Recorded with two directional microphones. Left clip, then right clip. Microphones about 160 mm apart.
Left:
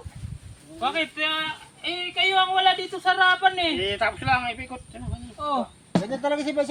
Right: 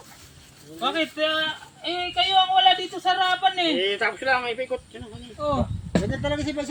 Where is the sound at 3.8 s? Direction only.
25° left (ahead or behind).